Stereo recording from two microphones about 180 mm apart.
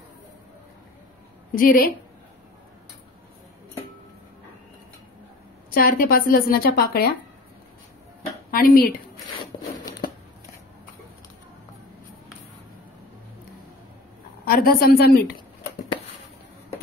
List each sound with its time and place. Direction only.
1.5 s a woman's voice: 50° left (ahead or behind)
5.7 s a woman's voice: 55° left (ahead or behind)
8.5 s a woman's voice: 50° left (ahead or behind)
14.4 s a woman's voice: 55° left (ahead or behind)